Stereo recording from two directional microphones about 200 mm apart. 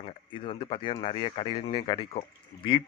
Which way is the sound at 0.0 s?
25° left (ahead or behind).